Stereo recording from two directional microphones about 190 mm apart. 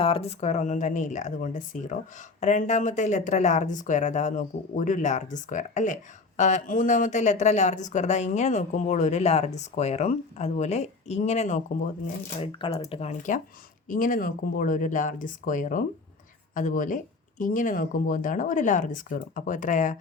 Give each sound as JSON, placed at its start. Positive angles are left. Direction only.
{"t": 0.0, "sound": "speech", "side_deg": 30}
{"t": 12.4, "sound": "speech", "side_deg": 30}